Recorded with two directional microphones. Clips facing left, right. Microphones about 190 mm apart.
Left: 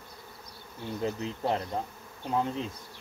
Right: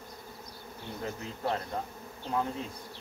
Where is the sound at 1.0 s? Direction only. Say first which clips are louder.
Left 6 dB; 20° left (ahead or behind).